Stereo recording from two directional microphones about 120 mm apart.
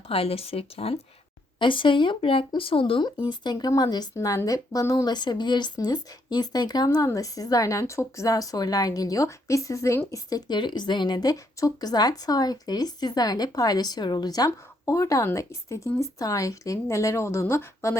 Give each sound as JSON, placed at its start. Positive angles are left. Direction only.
{"t": 0.1, "sound": "speech", "side_deg": 55}
{"t": 1.5, "sound": "speech", "side_deg": 45}
{"t": 3.2, "sound": "a woman's voice", "side_deg": 35}